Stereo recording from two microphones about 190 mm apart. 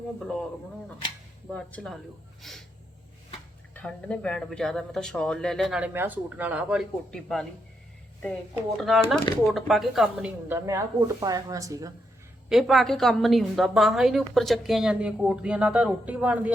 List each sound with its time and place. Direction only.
1.5 s a woman's voice: 5° left (ahead or behind)
3.8 s a woman's voice: 5° left (ahead or behind)
8.8 s a woman's voice: centre (ahead or behind)
10.7 s speech: 15° right (ahead or behind)
12.5 s a woman's voice: centre (ahead or behind)